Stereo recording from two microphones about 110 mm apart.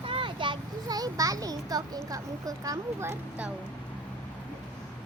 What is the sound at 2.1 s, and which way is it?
Speech, 30° right (ahead or behind).